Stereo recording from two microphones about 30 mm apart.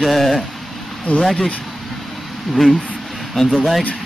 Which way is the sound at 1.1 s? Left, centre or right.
Left.